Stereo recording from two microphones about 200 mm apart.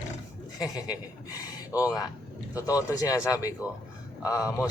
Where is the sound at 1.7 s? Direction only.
5° right (ahead or behind).